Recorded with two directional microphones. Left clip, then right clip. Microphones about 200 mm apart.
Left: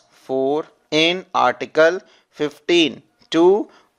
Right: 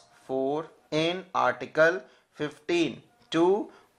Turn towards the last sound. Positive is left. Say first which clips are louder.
# left 9 dB
turn(degrees=40)  # may be behind; listen again after turning